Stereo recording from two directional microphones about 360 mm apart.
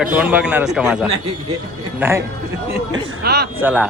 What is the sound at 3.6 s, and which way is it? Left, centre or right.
Speech, centre.